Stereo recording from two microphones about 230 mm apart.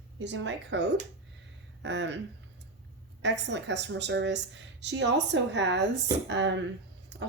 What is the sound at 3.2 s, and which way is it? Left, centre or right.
A woman's voice, right.